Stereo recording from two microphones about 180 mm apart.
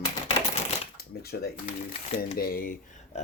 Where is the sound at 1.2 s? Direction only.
60° left (ahead or behind).